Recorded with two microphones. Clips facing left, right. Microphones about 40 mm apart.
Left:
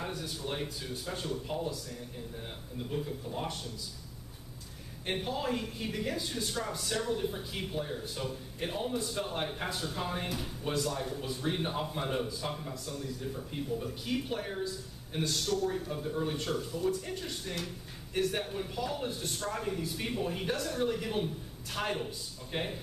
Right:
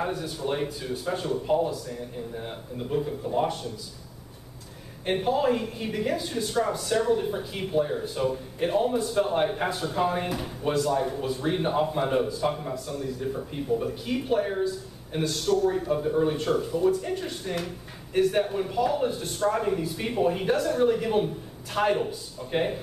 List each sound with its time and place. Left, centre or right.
0.0 s a man's voice: centre
5.0 s speech: centre
10.7 s speech: centre
11.0 s a man's voice: centre
13.7 s speech: centre
15.8 s a man's voice: right
19.5 s a man's voice: right